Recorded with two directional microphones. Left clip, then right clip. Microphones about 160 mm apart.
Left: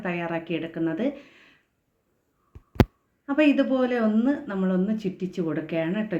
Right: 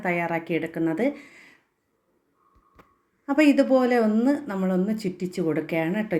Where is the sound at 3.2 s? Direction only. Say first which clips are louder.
Right 2 dB; 30° right (ahead or behind).